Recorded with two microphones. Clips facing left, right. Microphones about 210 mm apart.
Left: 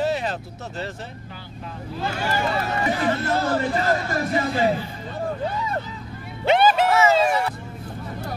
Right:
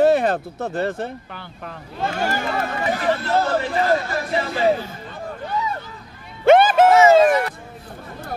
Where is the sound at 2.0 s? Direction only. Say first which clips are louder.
Right 2 dB; 45° right (ahead or behind).